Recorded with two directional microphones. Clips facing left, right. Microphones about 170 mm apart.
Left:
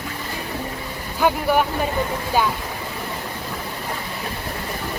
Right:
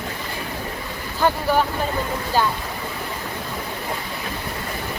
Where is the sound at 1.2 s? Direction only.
10° left (ahead or behind).